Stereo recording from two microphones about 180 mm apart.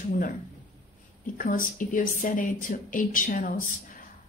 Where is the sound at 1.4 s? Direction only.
50° left (ahead or behind).